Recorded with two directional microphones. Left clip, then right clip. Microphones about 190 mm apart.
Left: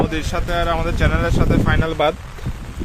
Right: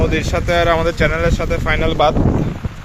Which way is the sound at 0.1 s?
5° right (ahead or behind).